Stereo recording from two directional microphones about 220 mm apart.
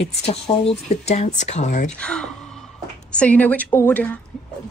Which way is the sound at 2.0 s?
5° left (ahead or behind).